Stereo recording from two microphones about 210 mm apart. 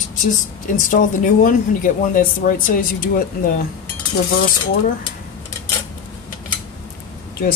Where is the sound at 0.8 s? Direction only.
40° left (ahead or behind).